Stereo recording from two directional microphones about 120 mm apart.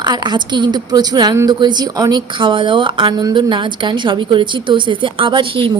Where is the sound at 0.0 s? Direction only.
35° right (ahead or behind).